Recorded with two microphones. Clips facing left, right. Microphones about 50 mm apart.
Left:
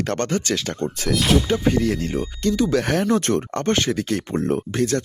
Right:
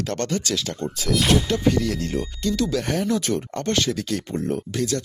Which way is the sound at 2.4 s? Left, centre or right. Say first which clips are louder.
Left 4 dB; left.